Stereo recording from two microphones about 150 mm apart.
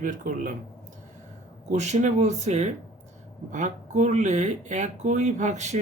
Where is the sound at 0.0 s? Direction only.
60° right (ahead or behind).